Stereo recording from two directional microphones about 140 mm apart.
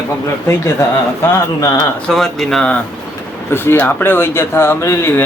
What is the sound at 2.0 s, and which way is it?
Speech, centre (ahead or behind).